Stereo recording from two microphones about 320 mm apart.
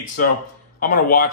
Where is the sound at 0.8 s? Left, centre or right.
Left.